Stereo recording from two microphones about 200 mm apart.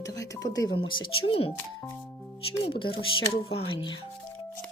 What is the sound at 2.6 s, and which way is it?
Speech, 25° left (ahead or behind).